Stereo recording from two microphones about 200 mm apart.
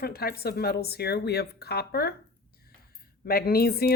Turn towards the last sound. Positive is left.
turn(degrees=50)  # may be behind; listen again after turning